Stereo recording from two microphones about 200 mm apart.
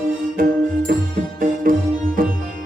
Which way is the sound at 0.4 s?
45° right (ahead or behind).